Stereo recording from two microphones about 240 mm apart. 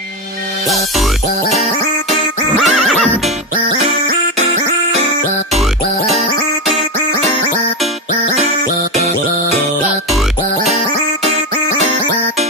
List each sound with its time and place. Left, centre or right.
0.7 s music: centre
1.5 s music: right
2.6 s music: centre